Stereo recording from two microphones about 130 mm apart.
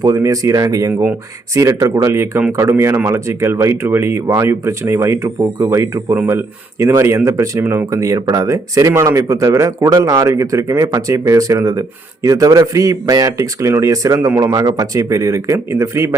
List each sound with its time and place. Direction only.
0.0 s speech: 25° right (ahead or behind)